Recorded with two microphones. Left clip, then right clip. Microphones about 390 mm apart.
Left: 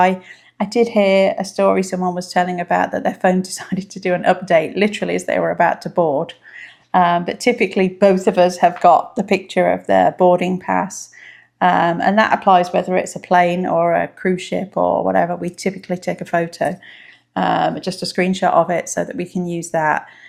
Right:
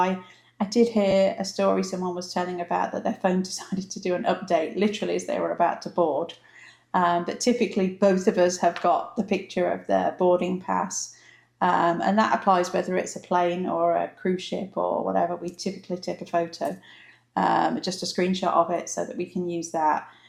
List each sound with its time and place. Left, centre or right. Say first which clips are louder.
0.6 s speech: left 7 dB; left
17.3 s speech: left 5 dB; left